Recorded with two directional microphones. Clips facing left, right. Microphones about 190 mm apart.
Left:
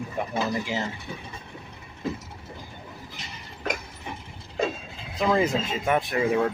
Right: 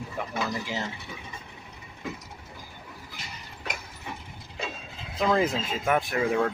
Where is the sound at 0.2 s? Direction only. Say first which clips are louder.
Left 4 dB; 20° left (ahead or behind).